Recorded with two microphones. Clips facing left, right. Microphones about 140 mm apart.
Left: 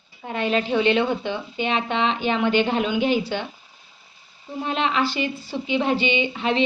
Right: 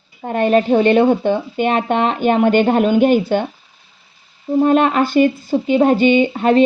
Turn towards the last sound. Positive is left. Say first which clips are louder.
# right 9 dB
turn(degrees=-45)  # may be behind; listen again after turning